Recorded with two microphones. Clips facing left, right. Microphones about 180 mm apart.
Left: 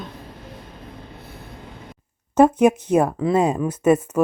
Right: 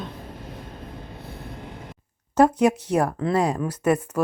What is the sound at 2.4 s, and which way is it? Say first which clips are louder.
Speech: left 3 dB; 20° left (ahead or behind).